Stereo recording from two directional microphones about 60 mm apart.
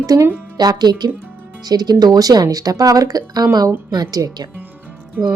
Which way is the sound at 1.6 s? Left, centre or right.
Right.